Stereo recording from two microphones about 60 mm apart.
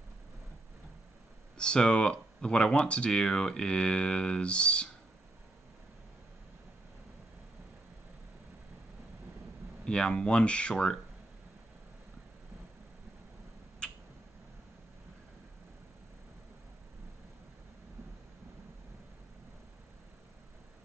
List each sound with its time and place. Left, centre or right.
1.6 s speech: centre
9.8 s speech: centre
13.8 s tick-tock: centre